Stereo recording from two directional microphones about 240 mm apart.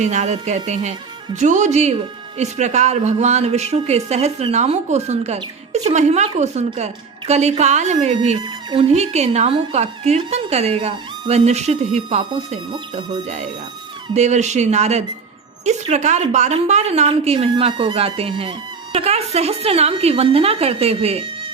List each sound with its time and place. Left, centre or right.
0.0 s speech: right